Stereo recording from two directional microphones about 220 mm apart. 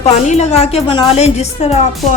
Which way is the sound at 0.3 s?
30° left (ahead or behind).